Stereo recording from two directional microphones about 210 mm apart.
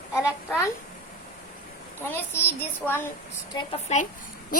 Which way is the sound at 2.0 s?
10° left (ahead or behind).